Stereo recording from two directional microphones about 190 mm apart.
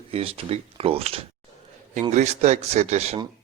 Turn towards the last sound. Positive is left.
turn(degrees=-35)  # may be behind; listen again after turning